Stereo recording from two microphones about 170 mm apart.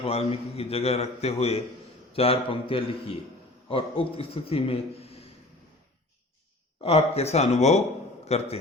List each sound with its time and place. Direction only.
0.0 s a man's voice: 35° left (ahead or behind)
6.8 s a man's voice: 35° left (ahead or behind)